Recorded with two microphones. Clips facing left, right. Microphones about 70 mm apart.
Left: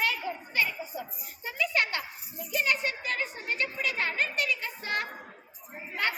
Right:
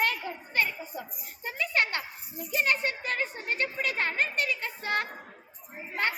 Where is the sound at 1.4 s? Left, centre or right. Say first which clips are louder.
Even; right.